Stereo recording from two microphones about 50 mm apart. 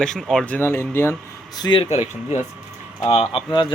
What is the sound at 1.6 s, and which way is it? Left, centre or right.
Speech, left.